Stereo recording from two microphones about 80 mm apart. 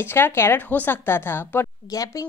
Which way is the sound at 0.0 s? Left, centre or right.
Left.